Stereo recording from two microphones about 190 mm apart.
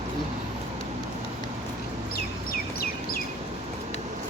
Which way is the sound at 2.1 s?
50° left (ahead or behind).